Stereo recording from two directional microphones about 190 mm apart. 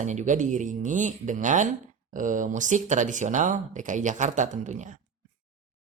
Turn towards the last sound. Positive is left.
turn(degrees=-40)  # may be behind; listen again after turning